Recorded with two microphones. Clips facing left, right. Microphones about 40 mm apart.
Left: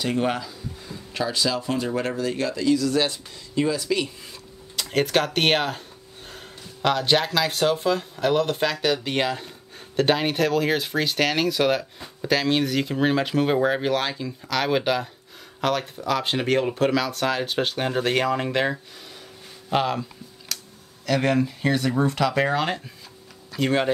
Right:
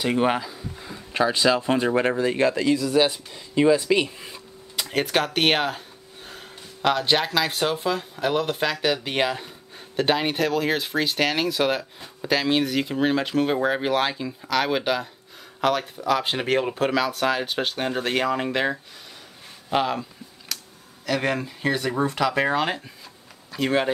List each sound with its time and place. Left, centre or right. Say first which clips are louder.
0.0 s speech: right 2 dB; right
2.8 s speech: right 2 dB; centre
4.7 s speech: left 1 dB; centre
19.7 s a sound: even; centre
21.0 s speech: left 3 dB; centre